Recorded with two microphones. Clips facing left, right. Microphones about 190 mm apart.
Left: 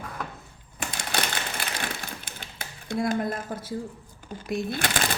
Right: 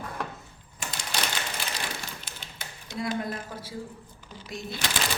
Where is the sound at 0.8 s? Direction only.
55° left (ahead or behind).